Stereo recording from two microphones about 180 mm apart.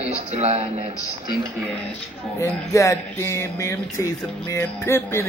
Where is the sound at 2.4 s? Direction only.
15° left (ahead or behind).